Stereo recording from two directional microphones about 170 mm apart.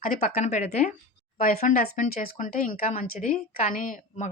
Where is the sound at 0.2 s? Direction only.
45° left (ahead or behind).